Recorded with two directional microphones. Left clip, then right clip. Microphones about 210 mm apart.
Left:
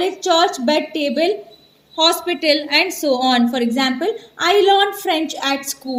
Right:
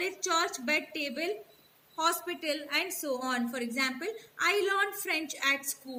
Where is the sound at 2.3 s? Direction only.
45° left (ahead or behind).